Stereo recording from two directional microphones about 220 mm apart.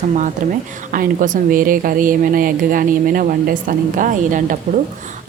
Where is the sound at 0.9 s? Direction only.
40° right (ahead or behind).